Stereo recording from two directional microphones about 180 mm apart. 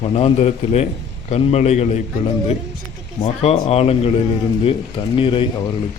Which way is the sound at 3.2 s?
35° left (ahead or behind).